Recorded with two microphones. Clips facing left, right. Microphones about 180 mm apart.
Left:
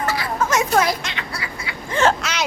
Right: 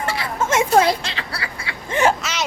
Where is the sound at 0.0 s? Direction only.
25° right (ahead or behind).